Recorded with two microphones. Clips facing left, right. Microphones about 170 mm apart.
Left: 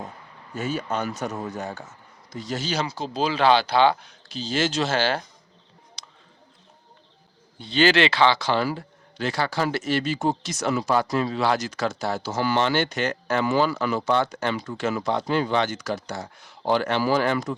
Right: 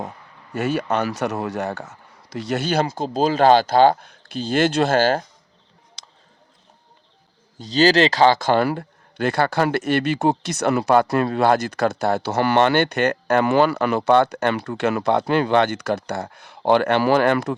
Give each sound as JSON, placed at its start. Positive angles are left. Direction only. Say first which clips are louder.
{"t": 0.5, "sound": "a man's voice", "louder": "right 6 dB", "side_deg": -70}
{"t": 7.6, "sound": "a man's voice", "louder": "right 4 dB", "side_deg": -40}